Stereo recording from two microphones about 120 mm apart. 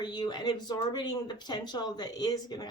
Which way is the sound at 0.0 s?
35° left (ahead or behind).